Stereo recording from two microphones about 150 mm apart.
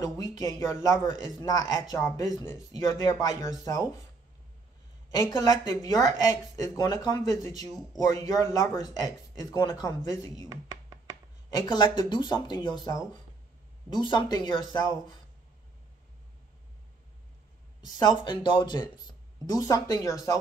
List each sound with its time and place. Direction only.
0.0 s speech: 25° left (ahead or behind)
5.4 s speech: 25° left (ahead or behind)
10.5 s a sound: 25° right (ahead or behind)
11.6 s speech: 30° left (ahead or behind)
17.8 s speech: 25° left (ahead or behind)